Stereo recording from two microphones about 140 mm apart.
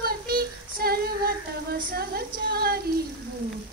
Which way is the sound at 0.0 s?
90° right.